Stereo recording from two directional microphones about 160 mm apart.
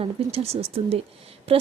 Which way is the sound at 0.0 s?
40° right (ahead or behind).